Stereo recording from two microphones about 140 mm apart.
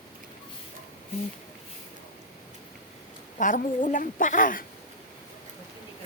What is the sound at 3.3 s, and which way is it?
A woman's voice, 70° left (ahead or behind).